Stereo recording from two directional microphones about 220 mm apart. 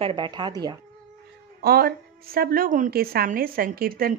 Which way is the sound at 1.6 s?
45° right (ahead or behind).